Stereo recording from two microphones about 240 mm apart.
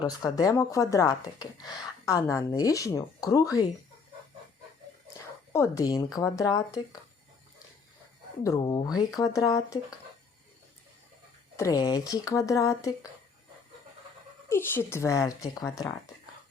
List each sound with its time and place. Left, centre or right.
0.0 s speech: centre
5.5 s speech: centre
8.4 s speech: centre
11.5 s speech: centre
14.5 s speech: centre